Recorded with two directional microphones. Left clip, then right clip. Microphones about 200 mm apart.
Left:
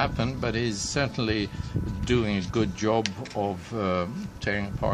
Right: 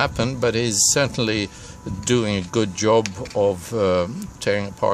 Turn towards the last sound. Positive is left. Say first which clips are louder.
# right 7 dB
turn(degrees=-45)  # may be behind; listen again after turning